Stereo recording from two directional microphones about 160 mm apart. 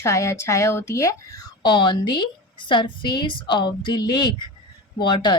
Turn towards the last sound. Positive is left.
turn(degrees=30)  # may be behind; listen again after turning